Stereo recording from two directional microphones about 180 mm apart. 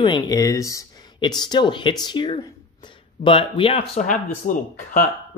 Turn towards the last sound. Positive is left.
turn(degrees=45)  # may be behind; listen again after turning